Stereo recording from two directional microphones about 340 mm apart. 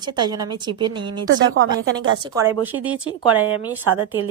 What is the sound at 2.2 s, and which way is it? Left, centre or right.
Speech, centre.